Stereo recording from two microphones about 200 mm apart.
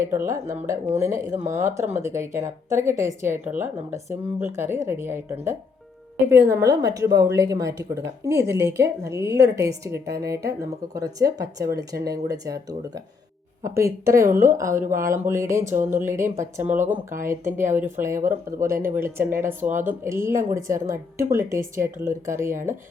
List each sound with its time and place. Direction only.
0.3 s a woman's voice: 15° right (ahead or behind)